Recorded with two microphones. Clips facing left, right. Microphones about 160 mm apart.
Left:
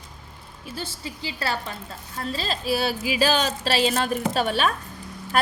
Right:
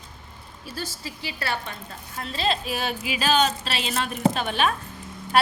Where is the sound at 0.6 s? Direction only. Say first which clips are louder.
Left 1 dB; 20° left (ahead or behind); by 4.7 s 40° left (ahead or behind).